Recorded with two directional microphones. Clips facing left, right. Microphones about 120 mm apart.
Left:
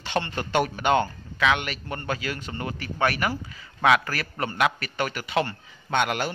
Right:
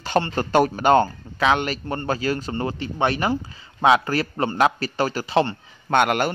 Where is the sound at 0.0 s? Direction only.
40° right (ahead or behind).